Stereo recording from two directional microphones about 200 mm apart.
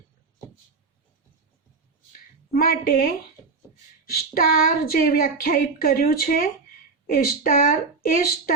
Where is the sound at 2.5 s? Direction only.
45° left (ahead or behind).